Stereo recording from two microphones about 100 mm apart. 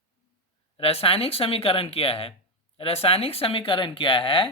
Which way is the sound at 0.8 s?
80° left.